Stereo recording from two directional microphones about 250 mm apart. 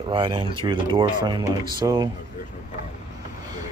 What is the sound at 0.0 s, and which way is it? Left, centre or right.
Speech, centre.